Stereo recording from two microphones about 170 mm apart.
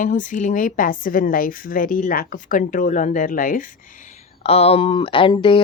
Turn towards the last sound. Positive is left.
turn(degrees=30)  # may be behind; listen again after turning